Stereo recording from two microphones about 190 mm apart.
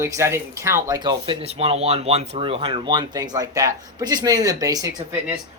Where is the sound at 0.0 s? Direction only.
15° right (ahead or behind).